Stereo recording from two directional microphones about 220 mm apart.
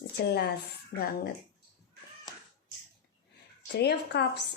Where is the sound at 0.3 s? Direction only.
45° left (ahead or behind).